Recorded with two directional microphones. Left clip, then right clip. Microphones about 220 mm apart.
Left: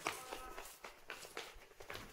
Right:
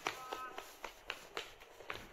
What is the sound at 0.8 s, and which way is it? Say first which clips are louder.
Run: right 4 dB; 45° right (ahead or behind).